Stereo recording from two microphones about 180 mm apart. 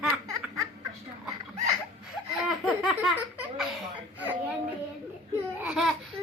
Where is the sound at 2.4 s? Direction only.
Centre (ahead or behind).